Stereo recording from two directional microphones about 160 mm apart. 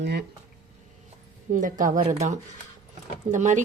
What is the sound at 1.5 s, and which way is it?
A woman's voice, 55° right (ahead or behind).